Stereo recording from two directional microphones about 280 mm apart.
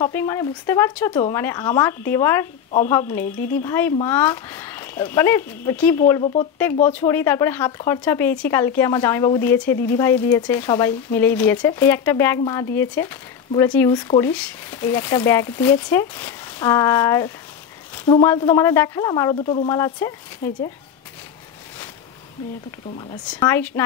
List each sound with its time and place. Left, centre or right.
0.0 s speech: centre
23.2 s speech: centre